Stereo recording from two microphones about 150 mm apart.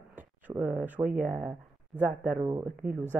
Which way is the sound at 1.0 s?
60° right (ahead or behind).